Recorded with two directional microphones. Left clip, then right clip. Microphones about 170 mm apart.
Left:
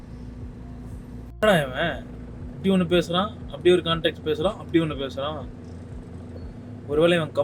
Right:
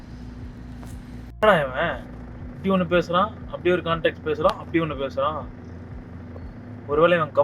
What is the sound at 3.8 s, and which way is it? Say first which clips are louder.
Speech: right 1 dB; 25° left (ahead or behind).